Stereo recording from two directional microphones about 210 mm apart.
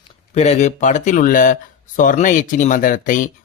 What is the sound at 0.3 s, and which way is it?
Speech, 30° left (ahead or behind).